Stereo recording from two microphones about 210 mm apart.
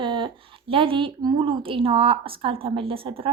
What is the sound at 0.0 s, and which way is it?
A woman's voice, 25° right (ahead or behind).